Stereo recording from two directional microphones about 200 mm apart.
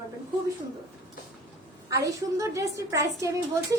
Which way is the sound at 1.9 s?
15° right (ahead or behind).